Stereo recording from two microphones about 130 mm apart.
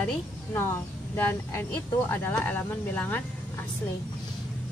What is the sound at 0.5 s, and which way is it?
Speech, 20° left (ahead or behind).